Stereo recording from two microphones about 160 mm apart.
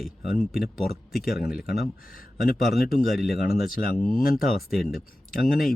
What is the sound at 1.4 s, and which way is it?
Speech, 70° left (ahead or behind).